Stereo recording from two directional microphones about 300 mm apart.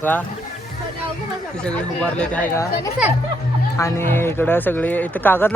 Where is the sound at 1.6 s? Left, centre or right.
Centre.